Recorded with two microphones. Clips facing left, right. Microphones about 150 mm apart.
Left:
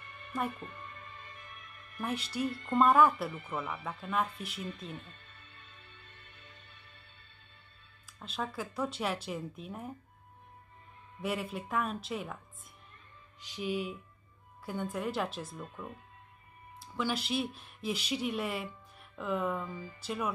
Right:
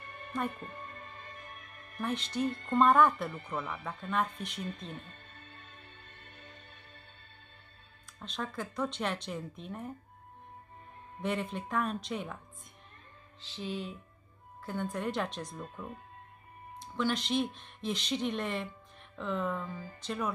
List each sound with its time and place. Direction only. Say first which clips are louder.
0.0 s music: even; 45° right (ahead or behind)
2.0 s speech: right 1 dB; 10° left (ahead or behind)
2.4 s speech: right 2 dB; 40° right (ahead or behind)
2.7 s speech: even; 5° left (ahead or behind)
4.6 s music: even; 40° right (ahead or behind)
8.2 s speech: left 1 dB; 5° left (ahead or behind)
11.2 s speech: right 1 dB; 5° left (ahead or behind)
13.4 s speech: left 3 dB; 15° left (ahead or behind)
16.8 s speech: right 2 dB; 5° left (ahead or behind)